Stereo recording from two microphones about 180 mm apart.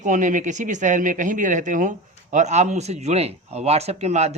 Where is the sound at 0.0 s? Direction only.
45° right (ahead or behind).